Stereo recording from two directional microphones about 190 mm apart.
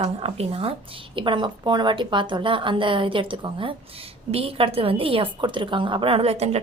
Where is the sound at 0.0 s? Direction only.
30° right (ahead or behind).